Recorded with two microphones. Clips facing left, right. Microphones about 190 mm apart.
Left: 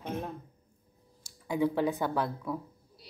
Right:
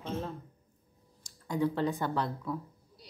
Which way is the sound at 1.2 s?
10° left (ahead or behind).